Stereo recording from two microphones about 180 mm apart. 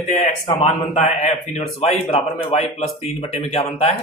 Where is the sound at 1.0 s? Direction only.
35° left (ahead or behind).